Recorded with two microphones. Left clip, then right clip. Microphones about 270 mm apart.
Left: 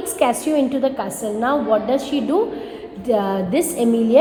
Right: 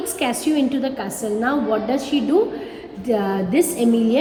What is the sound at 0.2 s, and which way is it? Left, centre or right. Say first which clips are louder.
Speech: left 4 dB; left.